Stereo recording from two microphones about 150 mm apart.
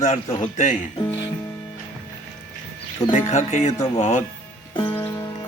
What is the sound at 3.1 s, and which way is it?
Speech, 55° left (ahead or behind).